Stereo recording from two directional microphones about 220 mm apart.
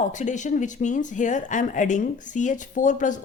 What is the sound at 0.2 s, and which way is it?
Speech, 35° left (ahead or behind).